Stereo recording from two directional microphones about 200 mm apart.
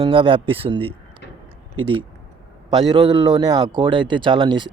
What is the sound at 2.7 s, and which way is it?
Speech, 25° right (ahead or behind).